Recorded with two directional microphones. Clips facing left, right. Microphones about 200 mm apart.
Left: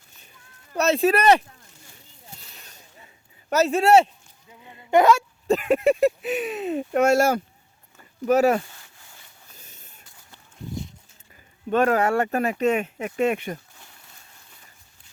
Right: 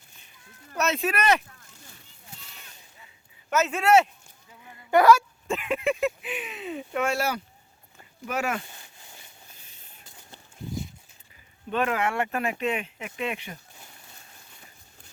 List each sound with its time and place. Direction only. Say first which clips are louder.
0.8 s speech: left 7 dB; 35° left (ahead or behind)
3.5 s speech: left 4 dB; 35° left (ahead or behind)
4.6 s hiccup: left 1 dB; 20° left (ahead or behind)
5.5 s speech: left 8 dB; 40° left (ahead or behind)
8.7 s a sound: right 1 dB; 20° right (ahead or behind)
11.7 s speech: left 7 dB; 40° left (ahead or behind)